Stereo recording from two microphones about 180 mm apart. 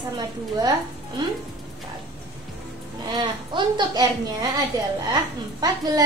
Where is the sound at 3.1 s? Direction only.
25° right (ahead or behind).